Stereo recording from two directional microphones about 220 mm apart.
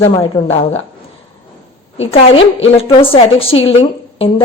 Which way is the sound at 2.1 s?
25° left (ahead or behind).